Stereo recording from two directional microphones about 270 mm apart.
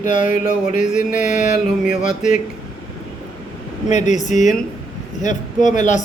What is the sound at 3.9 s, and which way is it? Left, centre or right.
A man's voice, left.